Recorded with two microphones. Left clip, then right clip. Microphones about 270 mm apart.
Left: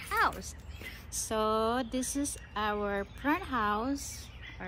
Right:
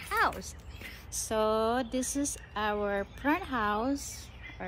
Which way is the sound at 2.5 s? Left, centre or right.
Centre.